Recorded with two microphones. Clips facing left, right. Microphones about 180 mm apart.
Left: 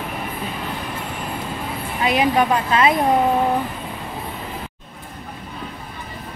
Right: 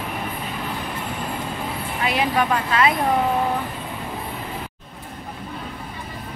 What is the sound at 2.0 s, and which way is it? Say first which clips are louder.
Speech: left 4 dB; 20° left (ahead or behind).